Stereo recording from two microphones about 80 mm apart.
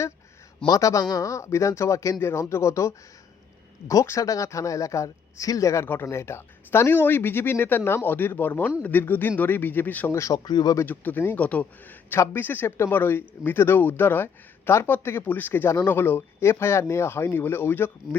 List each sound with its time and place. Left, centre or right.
0.7 s speech: left
5.8 s speech: left
10.1 s speech: left
10.3 s speech: left
10.8 s speech: left